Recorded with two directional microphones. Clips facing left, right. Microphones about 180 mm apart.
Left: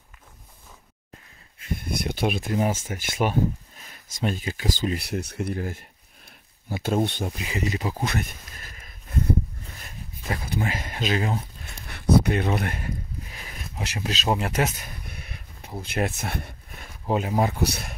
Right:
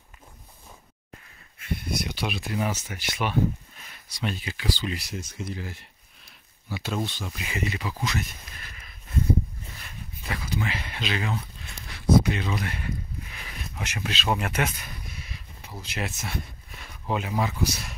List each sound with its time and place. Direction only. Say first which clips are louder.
1.7 s speech: left 2 dB; 50° left (ahead or behind)
7.3 s speech: left 3 dB; 35° left (ahead or behind)
8.0 s a sound: left 2 dB; 55° left (ahead or behind)
10.5 s speech: left 1 dB; 45° left (ahead or behind)
11.9 s a sound: left 1 dB; 55° left (ahead or behind); by 14.3 s 40° left (ahead or behind)
14.3 s speech: left 2 dB; 30° left (ahead or behind)
15.0 s a sound: left 1 dB; 55° left (ahead or behind)
15.8 s speech: left 6 dB; 55° left (ahead or behind)
17.1 s speech: left 4 dB; 40° left (ahead or behind)
17.6 s speech: left 2 dB; 60° left (ahead or behind)